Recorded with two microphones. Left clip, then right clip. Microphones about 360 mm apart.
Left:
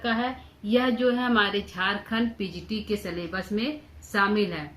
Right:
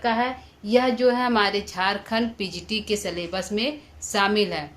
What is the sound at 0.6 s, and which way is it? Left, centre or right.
Speech, centre.